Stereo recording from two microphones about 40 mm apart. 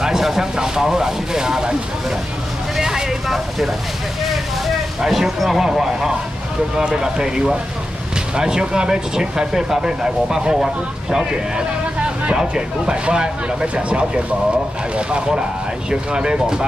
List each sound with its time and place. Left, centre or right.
0.0 s a sound: centre
0.6 s speech: centre
2.8 s vehicle: centre
5.0 s speech: centre; by 16.6 s right